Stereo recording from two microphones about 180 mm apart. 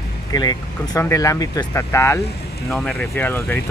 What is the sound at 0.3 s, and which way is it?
Speech, 20° left (ahead or behind).